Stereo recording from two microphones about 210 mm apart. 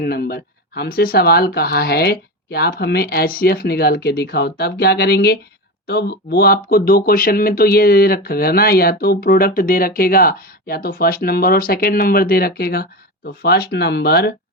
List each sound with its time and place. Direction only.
0.0 s speech: 45° left (ahead or behind)